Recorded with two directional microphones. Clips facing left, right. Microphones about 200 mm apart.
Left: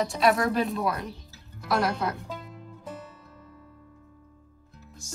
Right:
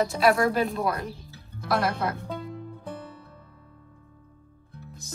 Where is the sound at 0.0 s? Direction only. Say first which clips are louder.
Right 2 dB; centre (ahead or behind).